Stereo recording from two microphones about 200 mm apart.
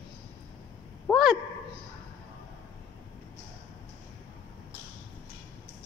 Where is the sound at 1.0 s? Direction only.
Centre (ahead or behind).